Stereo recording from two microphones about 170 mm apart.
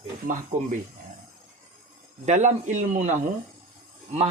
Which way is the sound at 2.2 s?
45° right (ahead or behind).